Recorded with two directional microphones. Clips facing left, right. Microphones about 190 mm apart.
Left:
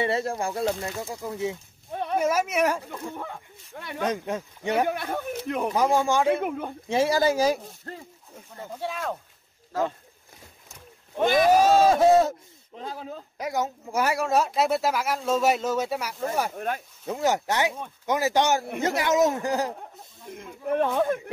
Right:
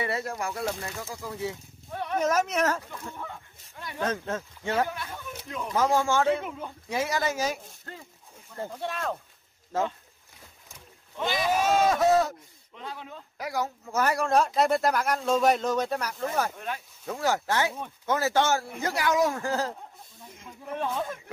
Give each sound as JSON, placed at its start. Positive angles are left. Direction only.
{"t": 0.0, "sound": "speech", "side_deg": 25}
{"t": 2.1, "sound": "speech", "side_deg": 10}
{"t": 4.0, "sound": "speech", "side_deg": 15}
{"t": 4.8, "sound": "speech", "side_deg": 60}
{"t": 5.8, "sound": "speech", "side_deg": 15}
{"t": 6.4, "sound": "speech", "side_deg": 60}
{"t": 6.9, "sound": "speech", "side_deg": 30}
{"t": 8.7, "sound": "speech", "side_deg": 5}
{"t": 11.1, "sound": "speech", "side_deg": 50}
{"t": 13.4, "sound": "speech", "side_deg": 20}
{"t": 16.5, "sound": "speech", "side_deg": 45}
{"t": 17.0, "sound": "speech", "side_deg": 20}
{"t": 20.3, "sound": "speech", "side_deg": 60}